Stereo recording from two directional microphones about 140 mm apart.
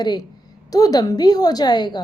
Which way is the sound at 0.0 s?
30° left (ahead or behind).